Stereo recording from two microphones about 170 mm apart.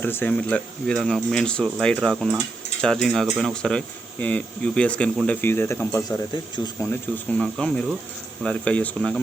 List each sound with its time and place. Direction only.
0.0 s speech: 10° left (ahead or behind)
6.3 s speech: 25° left (ahead or behind)
6.8 s speech: 5° left (ahead or behind)